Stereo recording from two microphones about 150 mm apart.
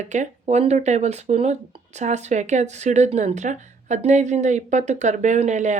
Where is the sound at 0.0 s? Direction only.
50° right (ahead or behind).